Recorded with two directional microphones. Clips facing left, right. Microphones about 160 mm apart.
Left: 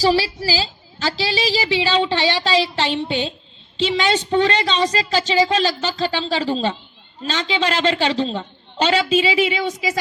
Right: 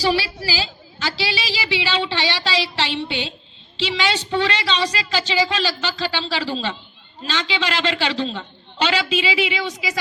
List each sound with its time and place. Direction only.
0.0 s a woman's voice: 40° left (ahead or behind)